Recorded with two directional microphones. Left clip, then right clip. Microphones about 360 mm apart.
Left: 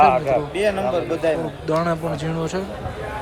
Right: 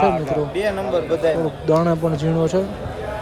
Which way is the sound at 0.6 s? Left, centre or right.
Centre.